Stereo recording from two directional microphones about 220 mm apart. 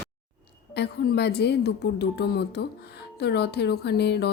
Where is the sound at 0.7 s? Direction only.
50° left (ahead or behind).